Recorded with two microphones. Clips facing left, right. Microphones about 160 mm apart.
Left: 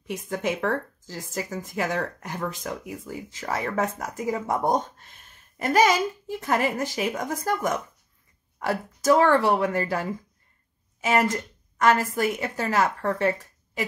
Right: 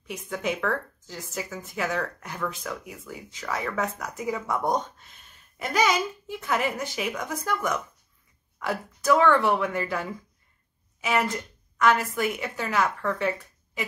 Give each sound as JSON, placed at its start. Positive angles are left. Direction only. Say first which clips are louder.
{"t": 0.3, "sound": "a woman's voice", "louder": "left 2 dB", "side_deg": 40}